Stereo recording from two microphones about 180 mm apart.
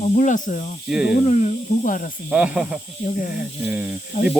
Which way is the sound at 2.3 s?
5° right (ahead or behind).